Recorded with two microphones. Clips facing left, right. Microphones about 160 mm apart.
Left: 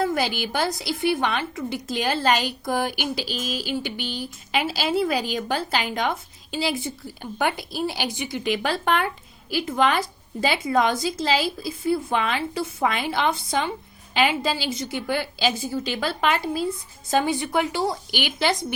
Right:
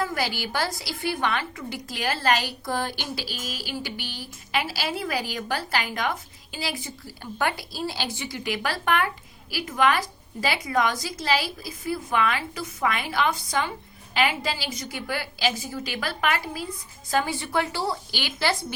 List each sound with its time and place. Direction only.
0.0 s a woman's voice: 25° left (ahead or behind)